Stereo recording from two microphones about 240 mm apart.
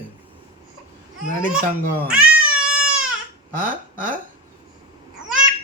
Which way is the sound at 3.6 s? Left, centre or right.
Right.